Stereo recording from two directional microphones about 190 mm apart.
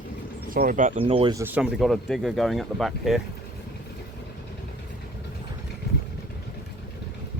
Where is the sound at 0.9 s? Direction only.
30° right (ahead or behind).